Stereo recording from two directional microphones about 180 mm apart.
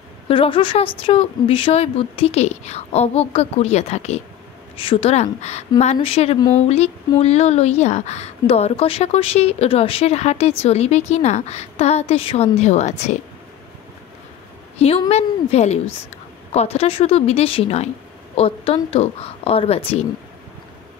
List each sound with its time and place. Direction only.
0.3 s speech: 30° left (ahead or behind)
14.8 s speech: 35° left (ahead or behind)